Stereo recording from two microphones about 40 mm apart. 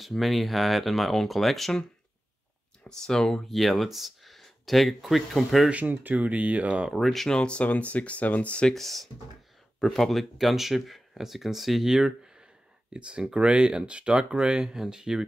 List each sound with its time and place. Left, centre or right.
0.0 s speech: centre
2.8 s speech: centre
5.7 s speech: right
7.2 s speech: left
8.7 s speech: centre
10.3 s speech: centre
12.9 s speech: right
14.7 s speech: centre